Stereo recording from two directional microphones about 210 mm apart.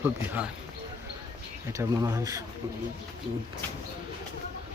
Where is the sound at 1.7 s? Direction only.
15° right (ahead or behind).